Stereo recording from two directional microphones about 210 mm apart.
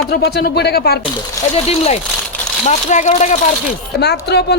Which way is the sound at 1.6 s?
30° left (ahead or behind).